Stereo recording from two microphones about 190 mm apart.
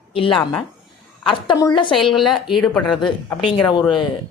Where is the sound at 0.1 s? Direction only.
30° left (ahead or behind).